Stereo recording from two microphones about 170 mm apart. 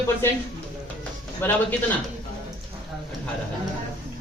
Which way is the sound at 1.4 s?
10° left (ahead or behind).